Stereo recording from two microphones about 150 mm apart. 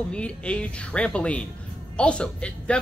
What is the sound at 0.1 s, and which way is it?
A man's voice, 5° left (ahead or behind).